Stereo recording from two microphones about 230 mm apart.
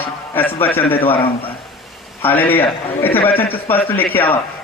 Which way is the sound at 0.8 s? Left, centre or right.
Left.